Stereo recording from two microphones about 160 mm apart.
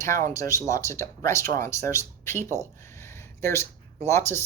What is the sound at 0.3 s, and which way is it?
Speech, 20° left (ahead or behind).